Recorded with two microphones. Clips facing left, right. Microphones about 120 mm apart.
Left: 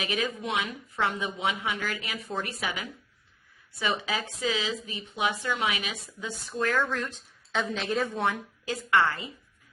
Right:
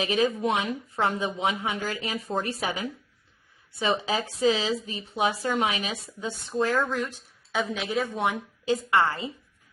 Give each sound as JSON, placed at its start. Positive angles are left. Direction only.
{"t": 0.0, "sound": "a woman's voice", "side_deg": -35}
{"t": 7.0, "sound": "a sound", "side_deg": -10}
{"t": 7.6, "sound": "speech", "side_deg": 0}
{"t": 8.0, "sound": "a woman's voice", "side_deg": -15}